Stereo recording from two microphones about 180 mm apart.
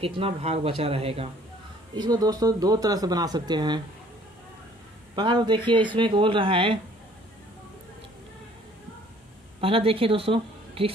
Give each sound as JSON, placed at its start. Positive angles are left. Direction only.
{"t": 0.0, "sound": "speech", "side_deg": -30}
{"t": 2.0, "sound": "speech", "side_deg": -20}
{"t": 5.1, "sound": "speech", "side_deg": -25}
{"t": 9.6, "sound": "a woman's voice", "side_deg": -30}